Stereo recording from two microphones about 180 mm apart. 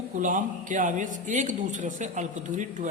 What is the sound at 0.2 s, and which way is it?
A man's voice, 45° right (ahead or behind).